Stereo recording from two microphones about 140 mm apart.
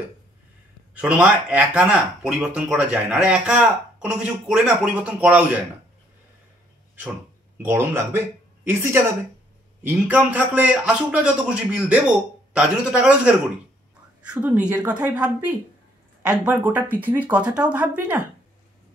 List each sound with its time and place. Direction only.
0.9 s speech: 10° right (ahead or behind)
7.5 s speech: 15° right (ahead or behind)
16.5 s speech: 10° right (ahead or behind)